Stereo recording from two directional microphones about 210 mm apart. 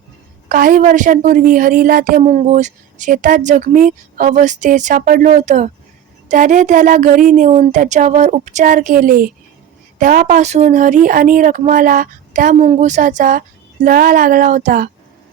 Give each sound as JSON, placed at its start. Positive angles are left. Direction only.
{"t": 0.4, "sound": "a woman's voice", "side_deg": -40}